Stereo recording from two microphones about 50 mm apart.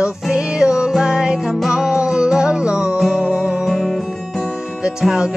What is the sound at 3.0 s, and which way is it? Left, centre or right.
Music, centre.